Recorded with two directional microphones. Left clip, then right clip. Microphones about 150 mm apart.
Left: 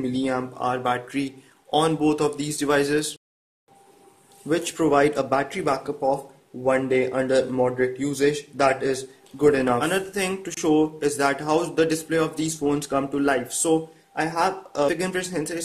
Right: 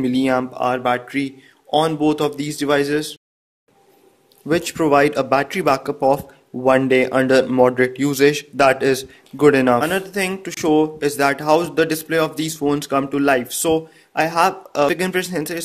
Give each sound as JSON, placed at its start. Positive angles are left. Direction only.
{"t": 0.0, "sound": "speech", "side_deg": -40}
{"t": 4.5, "sound": "speech", "side_deg": -20}
{"t": 9.8, "sound": "speech", "side_deg": -25}